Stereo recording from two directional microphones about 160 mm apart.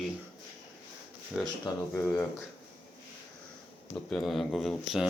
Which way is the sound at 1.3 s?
5° right (ahead or behind).